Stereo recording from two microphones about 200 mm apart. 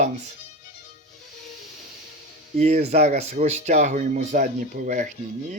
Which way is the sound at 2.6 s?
35° right (ahead or behind).